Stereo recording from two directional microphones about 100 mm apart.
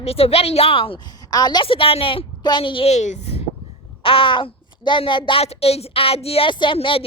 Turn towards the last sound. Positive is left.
turn(degrees=65)  # may be behind; listen again after turning